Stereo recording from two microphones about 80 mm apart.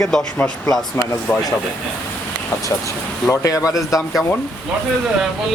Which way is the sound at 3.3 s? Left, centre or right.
Left.